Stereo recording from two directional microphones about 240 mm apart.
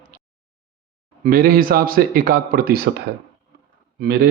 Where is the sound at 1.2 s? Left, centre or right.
Right.